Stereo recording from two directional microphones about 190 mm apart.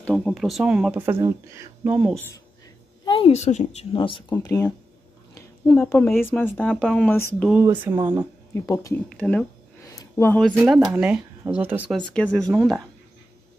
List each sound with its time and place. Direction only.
0.0 s speech: 5° left (ahead or behind)
2.1 s speech: 10° left (ahead or behind)
3.1 s speech: 30° left (ahead or behind)
5.3 s a sound: 15° left (ahead or behind)
6.3 s speech: 10° left (ahead or behind); by 7.9 s 10° right (ahead or behind)
8.5 s speech: 15° left (ahead or behind)
9.9 s a sound: 15° left (ahead or behind)
10.6 s speech: 5° right (ahead or behind)
12.1 s speech: 5° left (ahead or behind)